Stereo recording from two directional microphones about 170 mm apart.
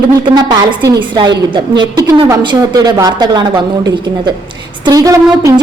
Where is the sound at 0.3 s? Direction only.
25° right (ahead or behind).